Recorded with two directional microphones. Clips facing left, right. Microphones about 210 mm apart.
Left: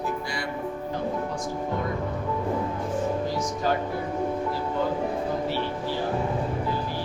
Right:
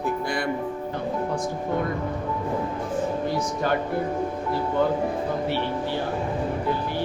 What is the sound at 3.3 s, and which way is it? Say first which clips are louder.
Speech: right 2 dB; 60° right (ahead or behind).